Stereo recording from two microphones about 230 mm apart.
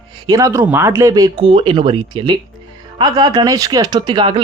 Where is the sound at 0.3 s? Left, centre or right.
Centre.